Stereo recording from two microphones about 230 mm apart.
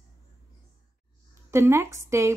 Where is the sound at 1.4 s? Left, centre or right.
Centre.